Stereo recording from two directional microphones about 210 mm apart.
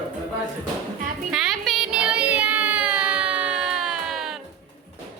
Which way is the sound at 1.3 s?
Centre (ahead or behind).